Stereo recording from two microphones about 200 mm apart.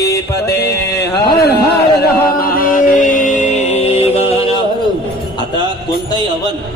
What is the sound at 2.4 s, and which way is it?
Music, 45° left (ahead or behind).